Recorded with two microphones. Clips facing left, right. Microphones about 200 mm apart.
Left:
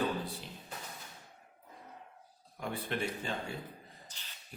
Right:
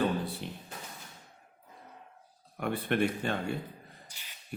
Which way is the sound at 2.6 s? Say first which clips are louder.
Right 7 dB; 65° right (ahead or behind).